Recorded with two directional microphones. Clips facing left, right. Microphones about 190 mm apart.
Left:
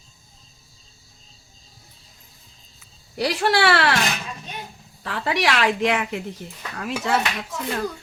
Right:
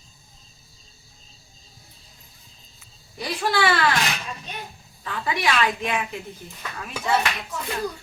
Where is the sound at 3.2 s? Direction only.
70° left (ahead or behind).